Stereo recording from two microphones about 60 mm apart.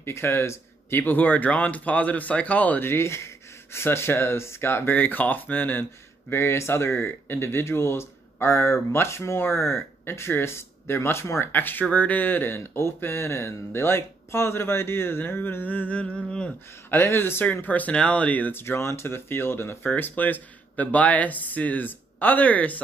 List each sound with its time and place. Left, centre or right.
0.0 s speech: left
2.8 s speech: left
4.9 s speech: left
6.3 s speech: left
11.5 s speech: left; by 16.5 s centre
17.0 s speech: left
18.5 s speech: left
19.9 s speech: left